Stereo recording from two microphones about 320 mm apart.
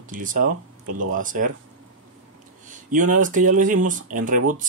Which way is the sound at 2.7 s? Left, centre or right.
Right.